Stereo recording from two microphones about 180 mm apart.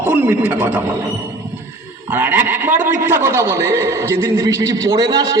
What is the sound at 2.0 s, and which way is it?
A man's voice, 10° right (ahead or behind).